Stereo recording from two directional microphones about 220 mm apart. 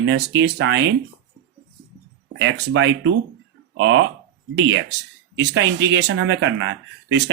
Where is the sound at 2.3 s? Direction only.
55° right (ahead or behind).